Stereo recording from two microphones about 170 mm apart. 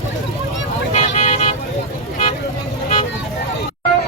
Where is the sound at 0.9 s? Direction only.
45° left (ahead or behind).